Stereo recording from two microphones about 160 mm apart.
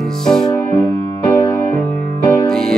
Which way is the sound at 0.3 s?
Centre (ahead or behind).